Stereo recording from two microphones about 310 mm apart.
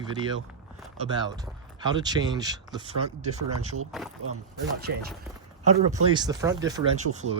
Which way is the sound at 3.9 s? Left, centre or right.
Centre.